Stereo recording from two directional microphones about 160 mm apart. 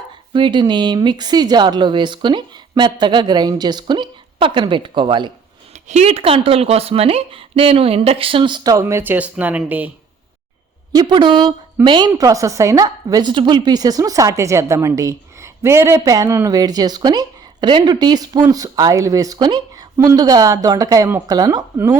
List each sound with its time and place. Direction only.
0.3 s speech: 30° right (ahead or behind)
5.9 s speech: 40° right (ahead or behind); by 9.9 s 10° right (ahead or behind)
10.9 s speech: 30° right (ahead or behind)